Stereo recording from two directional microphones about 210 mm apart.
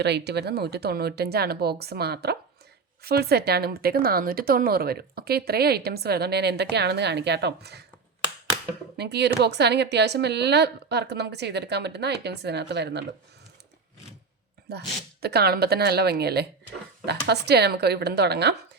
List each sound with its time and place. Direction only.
0.0 s a woman's voice: 55° right (ahead or behind)
9.0 s a woman's voice: 50° right (ahead or behind)
14.7 s a woman's voice: 50° right (ahead or behind)